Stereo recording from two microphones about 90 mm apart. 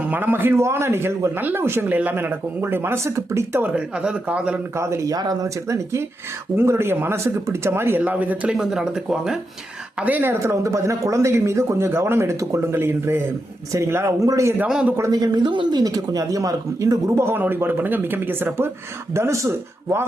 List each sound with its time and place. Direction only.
0.0 s speech: 20° right (ahead or behind)
3.6 s speech: 10° right (ahead or behind)
4.8 s speech: 35° right (ahead or behind); by 9.4 s 5° right (ahead or behind)
10.0 s speech: 20° right (ahead or behind)
14.6 s speech: 15° right (ahead or behind)
15.1 s speech: 50° right (ahead or behind)
15.8 s speech: 45° right (ahead or behind)